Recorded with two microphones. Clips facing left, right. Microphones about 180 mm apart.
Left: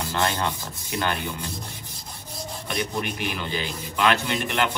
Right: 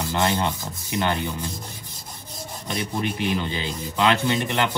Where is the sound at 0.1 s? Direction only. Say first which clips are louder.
Right 3 dB; 20° right (ahead or behind).